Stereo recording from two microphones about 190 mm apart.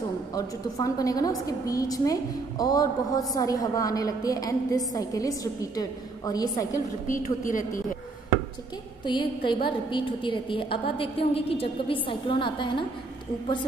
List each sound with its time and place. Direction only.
0.3 s a woman's voice: 20° left (ahead or behind)
7.1 s a woman's voice: 45° left (ahead or behind)
9.0 s a woman's voice: 25° left (ahead or behind)